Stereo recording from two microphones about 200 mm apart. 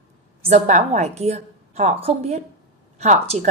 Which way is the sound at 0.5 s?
35° right (ahead or behind).